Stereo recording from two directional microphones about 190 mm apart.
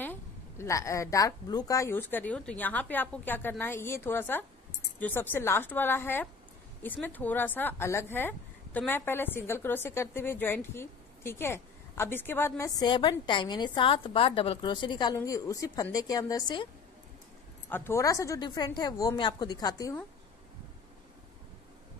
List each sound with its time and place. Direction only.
0.0 s a woman's voice: 10° left (ahead or behind)
17.6 s a woman's voice: 10° left (ahead or behind)